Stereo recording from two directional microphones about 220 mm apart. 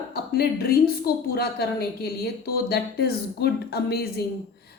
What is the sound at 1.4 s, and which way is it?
A woman's voice, 45° left (ahead or behind).